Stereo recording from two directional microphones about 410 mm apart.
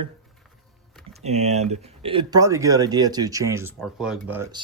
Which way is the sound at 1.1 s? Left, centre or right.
Centre.